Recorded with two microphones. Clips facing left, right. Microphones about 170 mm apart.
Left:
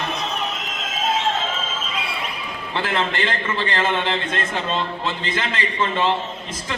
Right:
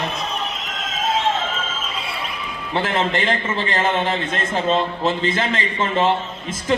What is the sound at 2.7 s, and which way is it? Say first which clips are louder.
Speech: right 2 dB; 20° right (ahead or behind).